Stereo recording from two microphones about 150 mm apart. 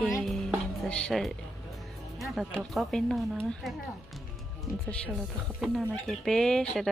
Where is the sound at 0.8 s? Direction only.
5° left (ahead or behind).